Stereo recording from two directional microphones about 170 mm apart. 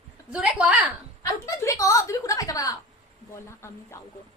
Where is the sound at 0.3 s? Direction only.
5° right (ahead or behind).